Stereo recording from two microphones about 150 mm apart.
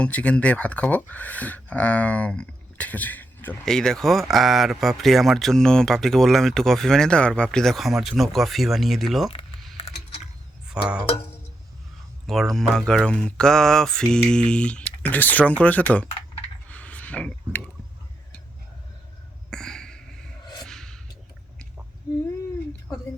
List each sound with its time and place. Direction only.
0.0 s speech: 10° left (ahead or behind)
10.7 s speech: 5° right (ahead or behind)
11.1 s music: 40° left (ahead or behind)
12.2 s speech: centre (ahead or behind)
16.6 s mechanisms: 10° left (ahead or behind)
19.5 s a sound: 5° left (ahead or behind)